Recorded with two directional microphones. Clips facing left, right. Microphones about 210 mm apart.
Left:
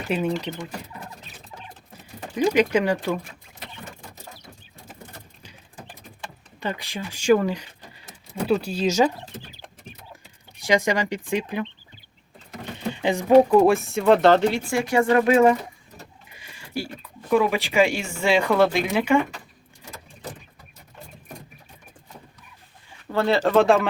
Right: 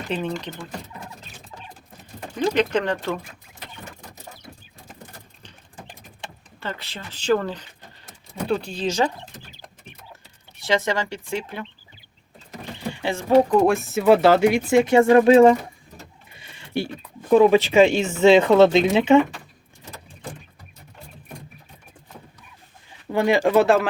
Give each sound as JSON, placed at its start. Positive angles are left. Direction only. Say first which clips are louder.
{"t": 0.1, "sound": "speech", "louder": "left 3 dB", "side_deg": 10}
{"t": 2.3, "sound": "speech", "louder": "left 2 dB", "side_deg": 10}
{"t": 6.6, "sound": "speech", "louder": "left 4 dB", "side_deg": 15}
{"t": 10.6, "sound": "speech", "louder": "left 1 dB", "side_deg": 15}
{"t": 12.9, "sound": "speech", "louder": "left 2 dB", "side_deg": 15}
{"t": 13.6, "sound": "speech", "louder": "left 1 dB", "side_deg": 0}
{"t": 23.1, "sound": "speech", "louder": "right 1 dB", "side_deg": -15}